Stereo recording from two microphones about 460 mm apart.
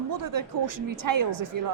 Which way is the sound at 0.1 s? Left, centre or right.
Right.